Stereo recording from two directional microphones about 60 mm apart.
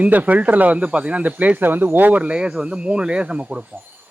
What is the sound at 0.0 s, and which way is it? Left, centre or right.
A man's voice, right.